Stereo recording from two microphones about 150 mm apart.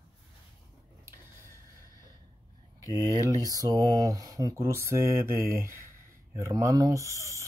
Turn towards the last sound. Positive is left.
turn(degrees=-20)  # may be behind; listen again after turning